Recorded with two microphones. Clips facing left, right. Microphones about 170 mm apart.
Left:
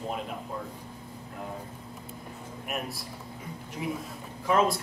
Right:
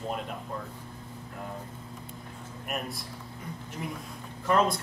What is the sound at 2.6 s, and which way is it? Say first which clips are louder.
Speech: even; centre (ahead or behind).